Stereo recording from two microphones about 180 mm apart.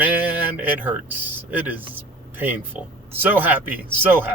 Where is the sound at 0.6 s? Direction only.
10° right (ahead or behind).